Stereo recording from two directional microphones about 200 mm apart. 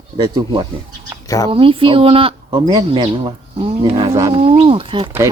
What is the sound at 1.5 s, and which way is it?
A woman's voice, 25° right (ahead or behind).